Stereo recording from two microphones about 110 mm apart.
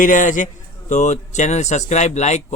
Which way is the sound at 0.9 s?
90° left.